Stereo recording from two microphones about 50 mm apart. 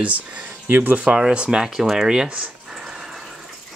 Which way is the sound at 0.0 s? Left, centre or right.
Right.